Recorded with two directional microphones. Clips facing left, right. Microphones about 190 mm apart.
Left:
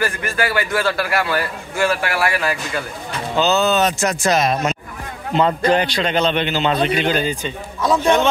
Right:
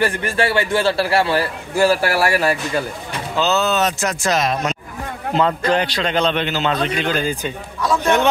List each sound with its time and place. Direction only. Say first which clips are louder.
0.0 s a man's voice: right 3 dB; 30° right (ahead or behind)
3.3 s a man's voice: left 2 dB; centre (ahead or behind)
7.2 s a man's voice: even; 10° right (ahead or behind)